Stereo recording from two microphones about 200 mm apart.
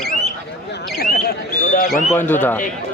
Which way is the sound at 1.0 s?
50° left (ahead or behind).